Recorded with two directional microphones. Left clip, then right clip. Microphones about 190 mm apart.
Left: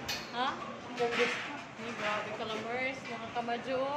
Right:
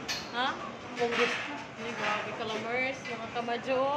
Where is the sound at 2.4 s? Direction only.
10° right (ahead or behind).